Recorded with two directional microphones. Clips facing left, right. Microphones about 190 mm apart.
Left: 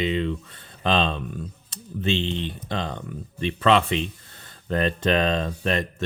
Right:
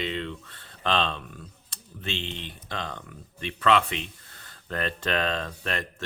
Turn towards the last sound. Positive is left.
turn(degrees=20)  # may be behind; listen again after turning